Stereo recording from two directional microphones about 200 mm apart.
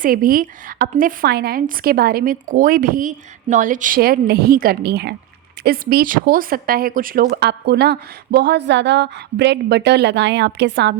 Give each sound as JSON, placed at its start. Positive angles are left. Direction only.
{"t": 0.0, "sound": "a woman's voice", "side_deg": -45}